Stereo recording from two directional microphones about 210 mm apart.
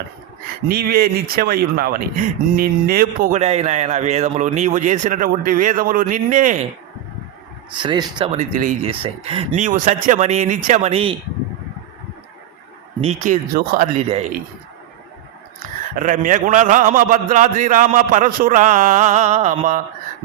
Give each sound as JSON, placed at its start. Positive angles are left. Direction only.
{"t": 0.7, "sound": "speech", "side_deg": -45}
{"t": 7.8, "sound": "speech", "side_deg": -20}
{"t": 8.9, "sound": "speech", "side_deg": -25}
{"t": 13.0, "sound": "speech", "side_deg": -35}
{"t": 16.0, "sound": "speech", "side_deg": -40}